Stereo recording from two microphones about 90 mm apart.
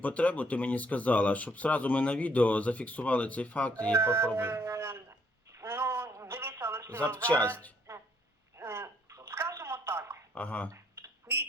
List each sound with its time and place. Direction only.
0.0 s speech: 15° left (ahead or behind)
3.9 s music: 25° right (ahead or behind)
4.4 s a sound: 30° right (ahead or behind)
7.2 s speech: 15° left (ahead or behind)
8.5 s a sound: 30° right (ahead or behind)
10.3 s speech: 15° left (ahead or behind)